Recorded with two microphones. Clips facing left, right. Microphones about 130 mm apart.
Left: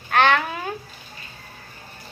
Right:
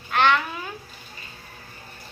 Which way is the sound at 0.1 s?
55° left (ahead or behind).